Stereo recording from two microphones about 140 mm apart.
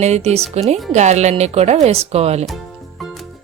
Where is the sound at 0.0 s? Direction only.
50° right (ahead or behind).